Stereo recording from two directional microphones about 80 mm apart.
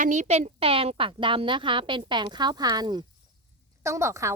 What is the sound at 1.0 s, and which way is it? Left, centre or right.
A woman's voice, right.